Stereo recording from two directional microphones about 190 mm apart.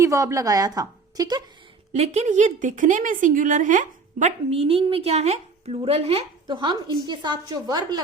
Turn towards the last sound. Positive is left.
turn(degrees=-20)  # may be behind; listen again after turning